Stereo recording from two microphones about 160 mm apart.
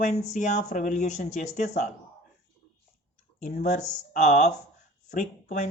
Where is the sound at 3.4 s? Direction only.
50° left (ahead or behind).